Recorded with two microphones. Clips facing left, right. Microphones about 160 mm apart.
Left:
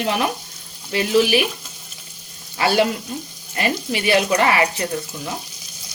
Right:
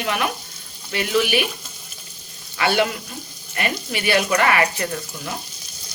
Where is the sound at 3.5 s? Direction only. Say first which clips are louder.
Left 3 dB; 30° left (ahead or behind).